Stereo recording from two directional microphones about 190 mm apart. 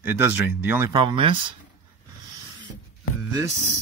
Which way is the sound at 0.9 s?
25° right (ahead or behind).